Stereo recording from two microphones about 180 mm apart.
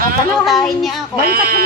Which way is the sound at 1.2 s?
55° right (ahead or behind).